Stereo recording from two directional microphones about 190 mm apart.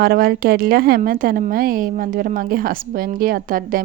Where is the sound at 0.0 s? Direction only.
55° right (ahead or behind).